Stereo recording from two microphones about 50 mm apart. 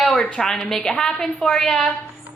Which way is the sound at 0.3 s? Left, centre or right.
Centre.